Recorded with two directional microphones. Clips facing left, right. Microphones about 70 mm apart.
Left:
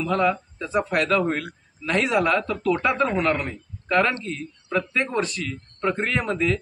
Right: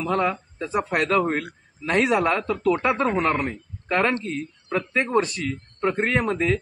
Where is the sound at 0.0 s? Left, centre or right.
Right.